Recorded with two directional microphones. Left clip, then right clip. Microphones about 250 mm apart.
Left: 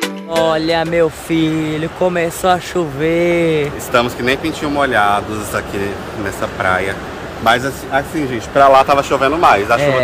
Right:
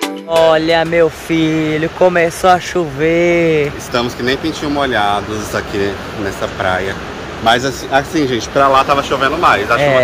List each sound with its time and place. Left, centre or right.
0.0 s speech: centre
7.4 s speech: centre
8.7 s a man's voice: left